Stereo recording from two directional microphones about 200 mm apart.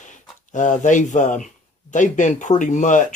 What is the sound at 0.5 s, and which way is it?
Speech, 40° left (ahead or behind).